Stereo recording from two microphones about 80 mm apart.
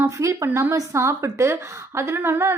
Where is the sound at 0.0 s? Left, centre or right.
Right.